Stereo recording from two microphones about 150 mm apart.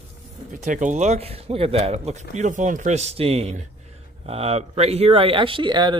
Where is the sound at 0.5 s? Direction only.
60° right (ahead or behind); by 5.9 s 30° right (ahead or behind).